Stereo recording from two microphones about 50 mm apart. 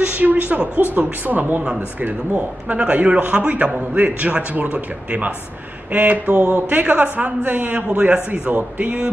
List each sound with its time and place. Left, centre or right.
0.2 s speech: right
2.8 s a man's voice: right